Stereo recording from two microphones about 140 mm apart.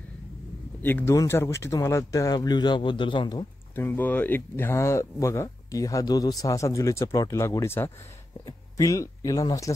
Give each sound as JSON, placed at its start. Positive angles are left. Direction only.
{"t": 0.8, "sound": "speech", "side_deg": 15}
{"t": 3.7, "sound": "speech", "side_deg": 15}